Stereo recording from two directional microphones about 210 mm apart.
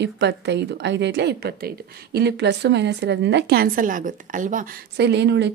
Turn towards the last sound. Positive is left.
turn(degrees=-55)  # may be behind; listen again after turning